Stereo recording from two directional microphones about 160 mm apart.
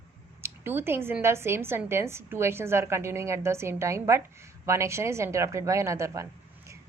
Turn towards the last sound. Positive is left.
turn(degrees=-20)  # may be behind; listen again after turning